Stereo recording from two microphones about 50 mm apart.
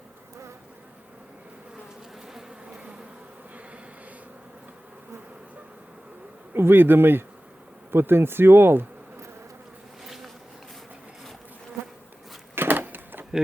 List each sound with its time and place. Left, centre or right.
2.2 s bee: centre
6.5 s speech: right
10.0 s bee: centre
12.5 s a sound: right